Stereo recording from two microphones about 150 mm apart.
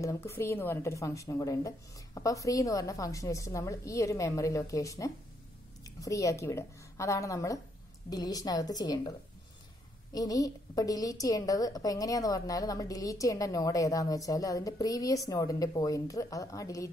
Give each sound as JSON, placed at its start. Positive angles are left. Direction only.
{"t": 0.0, "sound": "a woman's voice", "side_deg": 15}
{"t": 10.1, "sound": "a woman's voice", "side_deg": 25}